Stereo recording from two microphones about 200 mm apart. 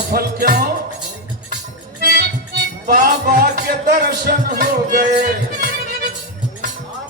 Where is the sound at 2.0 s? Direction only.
50° right (ahead or behind).